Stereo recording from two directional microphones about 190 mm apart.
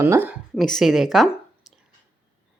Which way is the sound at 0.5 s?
Centre (ahead or behind).